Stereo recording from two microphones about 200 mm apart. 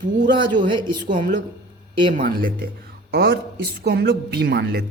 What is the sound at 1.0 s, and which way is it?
A woman's voice, 40° right (ahead or behind).